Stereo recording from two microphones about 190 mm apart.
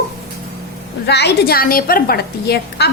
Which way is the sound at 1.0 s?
60° left (ahead or behind).